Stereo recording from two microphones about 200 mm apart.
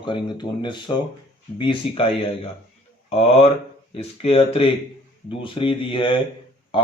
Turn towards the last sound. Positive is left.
turn(degrees=25)  # may be behind; listen again after turning